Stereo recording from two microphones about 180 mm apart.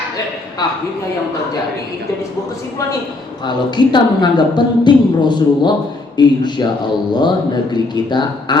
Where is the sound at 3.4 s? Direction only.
25° left (ahead or behind).